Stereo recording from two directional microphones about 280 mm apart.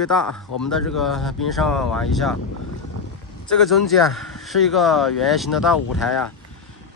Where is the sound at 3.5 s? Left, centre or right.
Centre.